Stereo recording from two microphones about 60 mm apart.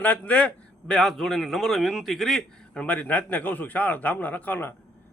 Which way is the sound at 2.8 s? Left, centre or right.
Left.